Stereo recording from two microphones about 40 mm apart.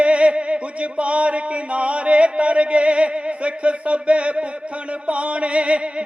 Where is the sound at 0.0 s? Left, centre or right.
Right.